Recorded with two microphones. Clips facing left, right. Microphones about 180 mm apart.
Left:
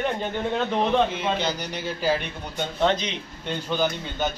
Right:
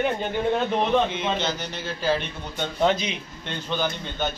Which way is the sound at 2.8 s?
10° right (ahead or behind).